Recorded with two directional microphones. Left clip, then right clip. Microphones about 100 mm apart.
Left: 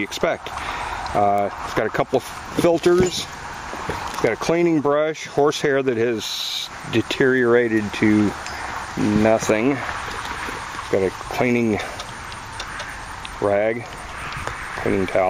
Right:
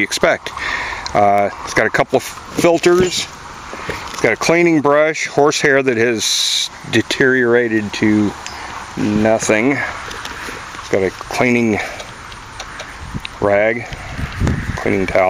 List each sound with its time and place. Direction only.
0.0 s speech: 30° right (ahead or behind)
9.2 s speech: 30° right (ahead or behind)
10.9 s speech: 30° right (ahead or behind)
13.4 s speech: 30° right (ahead or behind)
15.2 s speech: 30° right (ahead or behind)